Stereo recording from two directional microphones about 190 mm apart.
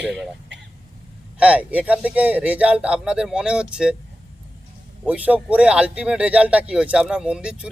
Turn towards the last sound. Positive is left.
turn(degrees=-5)  # may be behind; listen again after turning